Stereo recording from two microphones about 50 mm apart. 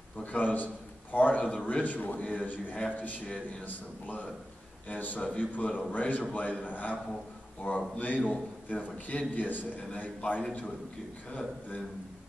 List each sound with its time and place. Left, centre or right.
0.2 s a man's voice: left
11.2 s a man's voice: left